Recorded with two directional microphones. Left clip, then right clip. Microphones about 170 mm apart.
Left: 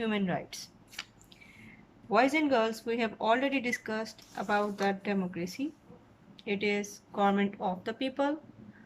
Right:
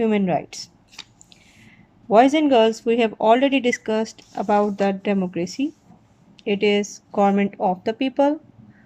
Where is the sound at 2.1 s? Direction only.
45° right (ahead or behind).